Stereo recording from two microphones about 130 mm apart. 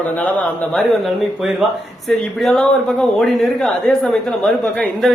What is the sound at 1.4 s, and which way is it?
A man's voice, 5° right (ahead or behind).